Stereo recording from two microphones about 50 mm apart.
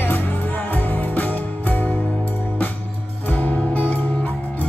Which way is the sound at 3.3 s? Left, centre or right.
Left.